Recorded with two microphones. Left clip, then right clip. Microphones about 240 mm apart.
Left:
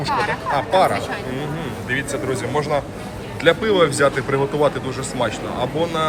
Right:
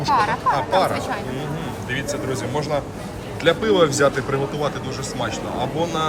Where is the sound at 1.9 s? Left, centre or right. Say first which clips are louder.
Left 3 dB; centre.